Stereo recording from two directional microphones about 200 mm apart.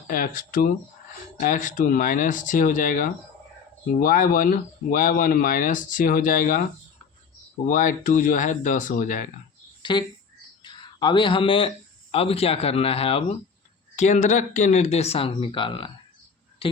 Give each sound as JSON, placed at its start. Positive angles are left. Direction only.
{"t": 0.1, "sound": "speech", "side_deg": 45}
{"t": 7.7, "sound": "speech", "side_deg": 40}
{"t": 9.8, "sound": "speech", "side_deg": 25}
{"t": 10.6, "sound": "a sound", "side_deg": 25}
{"t": 12.1, "sound": "speech", "side_deg": 30}